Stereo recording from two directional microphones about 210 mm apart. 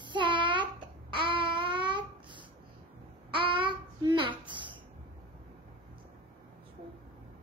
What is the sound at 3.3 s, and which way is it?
Child singing, 25° right (ahead or behind).